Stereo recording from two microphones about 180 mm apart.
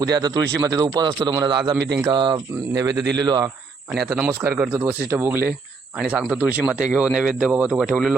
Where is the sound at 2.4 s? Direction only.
10° right (ahead or behind).